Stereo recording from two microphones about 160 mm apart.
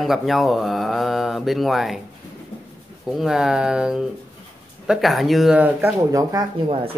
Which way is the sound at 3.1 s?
Centre (ahead or behind).